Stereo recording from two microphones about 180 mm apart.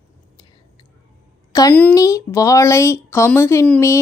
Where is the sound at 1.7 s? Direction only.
10° left (ahead or behind).